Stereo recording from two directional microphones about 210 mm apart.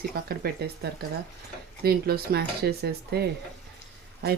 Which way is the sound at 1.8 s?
50° right (ahead or behind).